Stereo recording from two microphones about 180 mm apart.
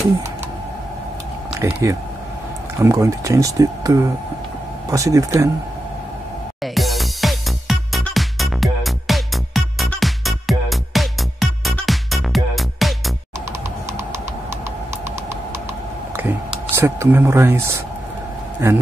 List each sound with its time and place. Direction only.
1.6 s speech: 15° right (ahead or behind)
6.6 s music: centre (ahead or behind)
16.2 s a sound: 10° right (ahead or behind)